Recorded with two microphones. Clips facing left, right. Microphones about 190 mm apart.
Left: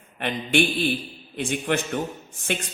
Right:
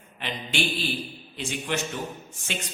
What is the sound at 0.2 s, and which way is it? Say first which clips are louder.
A man's voice: left 8 dB; 55° left (ahead or behind).